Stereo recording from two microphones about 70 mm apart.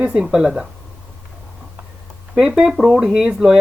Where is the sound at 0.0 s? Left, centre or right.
Centre.